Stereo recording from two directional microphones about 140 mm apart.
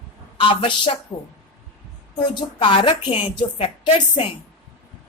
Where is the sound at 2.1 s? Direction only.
35° left (ahead or behind).